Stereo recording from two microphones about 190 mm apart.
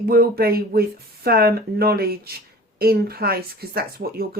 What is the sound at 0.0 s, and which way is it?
Speech, 50° right (ahead or behind).